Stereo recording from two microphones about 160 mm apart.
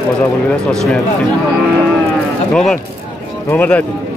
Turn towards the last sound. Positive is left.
turn(degrees=10)  # may be behind; listen again after turning